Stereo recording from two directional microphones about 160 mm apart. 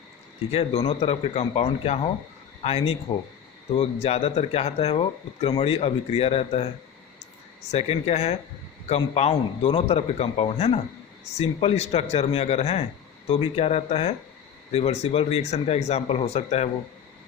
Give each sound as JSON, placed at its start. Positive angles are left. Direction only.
{"t": 0.5, "sound": "speech", "side_deg": 35}
{"t": 7.7, "sound": "speech", "side_deg": 40}